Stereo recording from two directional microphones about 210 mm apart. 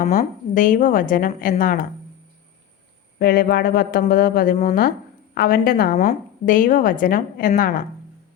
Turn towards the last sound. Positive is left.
turn(degrees=45)  # may be behind; listen again after turning